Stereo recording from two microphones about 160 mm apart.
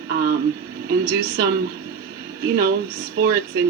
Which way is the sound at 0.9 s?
75° right (ahead or behind).